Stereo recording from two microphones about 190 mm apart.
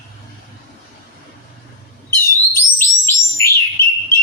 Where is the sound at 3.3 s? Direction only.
15° left (ahead or behind).